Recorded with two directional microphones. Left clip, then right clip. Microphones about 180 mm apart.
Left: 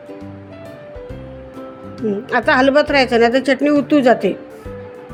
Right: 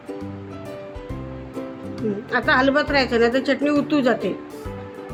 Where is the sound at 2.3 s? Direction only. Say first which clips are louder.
Left 5 dB; 30° left (ahead or behind).